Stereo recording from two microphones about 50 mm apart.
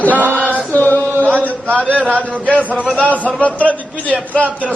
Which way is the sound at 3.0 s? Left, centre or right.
Left.